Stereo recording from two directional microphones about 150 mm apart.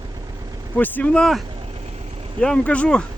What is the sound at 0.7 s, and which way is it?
Speech, 10° left (ahead or behind).